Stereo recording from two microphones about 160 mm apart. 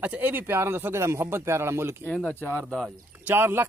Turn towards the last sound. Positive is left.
turn(degrees=-15)  # may be behind; listen again after turning